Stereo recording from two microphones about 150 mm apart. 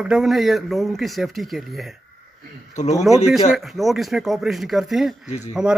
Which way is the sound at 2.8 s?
50° left (ahead or behind).